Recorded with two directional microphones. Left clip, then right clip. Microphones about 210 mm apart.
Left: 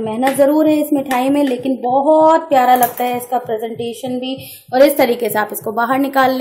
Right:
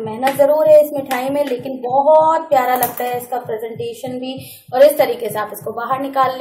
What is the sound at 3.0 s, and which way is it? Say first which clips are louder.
Speech: left 3 dB; 30° left (ahead or behind).